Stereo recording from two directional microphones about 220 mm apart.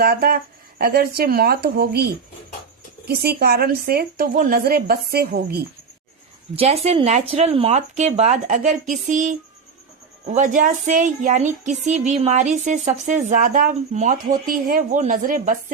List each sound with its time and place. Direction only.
0.0 s a woman's voice: 45° right (ahead or behind)
3.1 s a woman's voice: 45° right (ahead or behind)
6.6 s speech: 30° right (ahead or behind)